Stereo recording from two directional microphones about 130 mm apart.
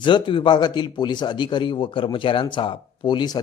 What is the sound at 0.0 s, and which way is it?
Speech, 40° left (ahead or behind).